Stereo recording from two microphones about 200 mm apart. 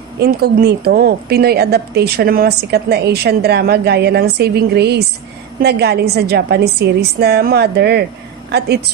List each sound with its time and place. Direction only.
0.2 s a woman's voice: 50° right (ahead or behind)